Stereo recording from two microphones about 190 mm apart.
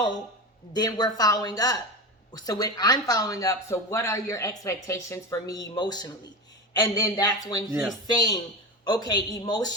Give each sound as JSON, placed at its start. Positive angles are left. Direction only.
{"t": 0.7, "sound": "speech", "side_deg": 20}